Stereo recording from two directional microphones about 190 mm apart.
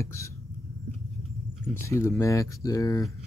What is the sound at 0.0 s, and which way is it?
Speech, 15° left (ahead or behind).